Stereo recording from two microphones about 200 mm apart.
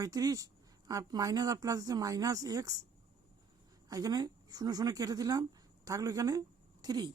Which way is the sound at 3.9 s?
20° right (ahead or behind).